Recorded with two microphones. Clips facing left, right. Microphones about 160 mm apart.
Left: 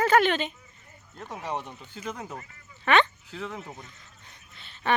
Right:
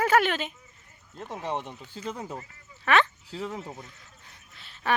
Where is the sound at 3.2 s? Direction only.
35° right (ahead or behind).